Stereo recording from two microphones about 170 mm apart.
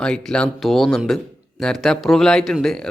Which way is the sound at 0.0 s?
5° left (ahead or behind).